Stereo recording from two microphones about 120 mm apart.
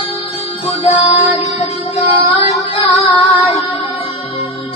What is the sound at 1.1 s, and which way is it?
Music, 50° left (ahead or behind).